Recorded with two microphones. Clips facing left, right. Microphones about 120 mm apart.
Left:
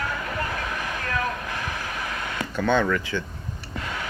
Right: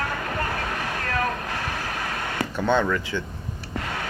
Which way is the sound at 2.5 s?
20° right (ahead or behind).